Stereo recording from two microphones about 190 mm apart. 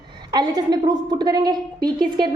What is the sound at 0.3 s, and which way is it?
A woman's voice, 20° right (ahead or behind).